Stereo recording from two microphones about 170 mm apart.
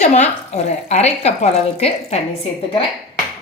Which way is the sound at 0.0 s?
45° left (ahead or behind).